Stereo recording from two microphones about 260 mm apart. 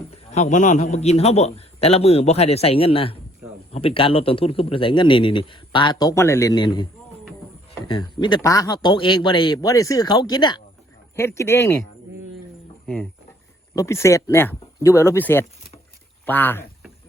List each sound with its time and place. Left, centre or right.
0.3 s a man's voice: left; by 11.8 s centre
13.7 s a man's voice: centre
16.2 s a sound: centre